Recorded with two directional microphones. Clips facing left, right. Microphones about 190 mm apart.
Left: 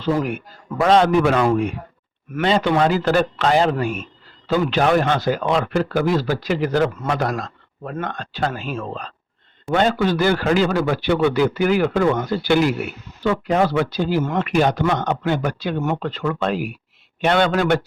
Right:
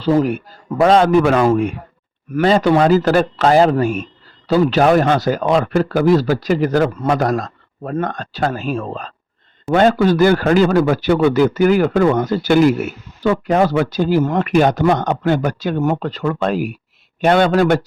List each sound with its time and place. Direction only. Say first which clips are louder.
0.0 s a man's voice: right 6 dB; 35° right (ahead or behind)